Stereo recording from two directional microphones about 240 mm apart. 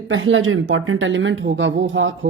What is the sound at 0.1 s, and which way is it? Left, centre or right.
Speech, right.